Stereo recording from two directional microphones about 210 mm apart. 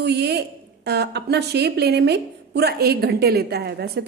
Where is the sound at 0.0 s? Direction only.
50° right (ahead or behind).